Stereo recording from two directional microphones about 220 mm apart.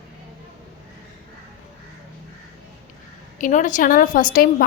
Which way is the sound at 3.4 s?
35° left (ahead or behind).